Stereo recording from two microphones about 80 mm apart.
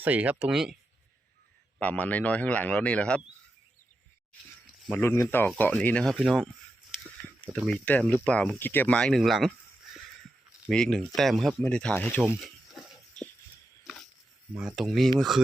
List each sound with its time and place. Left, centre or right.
0.0 s speech: centre
1.8 s a man's voice: centre
4.9 s a man's voice: left; by 6.1 s centre
6.1 s speech: centre
7.2 s a sound: centre
7.7 s a man's voice: centre
8.5 s speech: left
9.1 s speech: centre
10.7 s speech: centre
11.6 s a man's voice: centre
13.2 s music: centre
13.8 s a sound: centre
14.8 s speech: centre